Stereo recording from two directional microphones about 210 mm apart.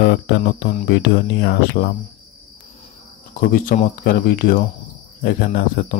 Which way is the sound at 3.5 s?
40° left (ahead or behind).